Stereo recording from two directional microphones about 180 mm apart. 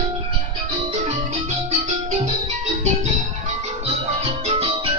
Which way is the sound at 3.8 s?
35° right (ahead or behind).